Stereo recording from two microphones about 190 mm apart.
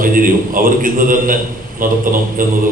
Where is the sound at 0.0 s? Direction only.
45° right (ahead or behind).